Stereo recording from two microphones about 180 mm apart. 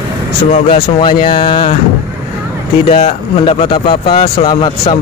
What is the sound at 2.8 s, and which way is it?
Speech, 30° left (ahead or behind).